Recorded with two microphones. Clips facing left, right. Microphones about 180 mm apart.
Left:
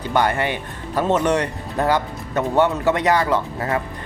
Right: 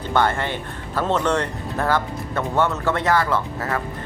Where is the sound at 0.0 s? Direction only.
15° left (ahead or behind).